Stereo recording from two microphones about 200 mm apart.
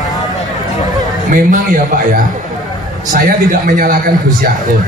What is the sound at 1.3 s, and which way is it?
A man's voice, 45° right (ahead or behind).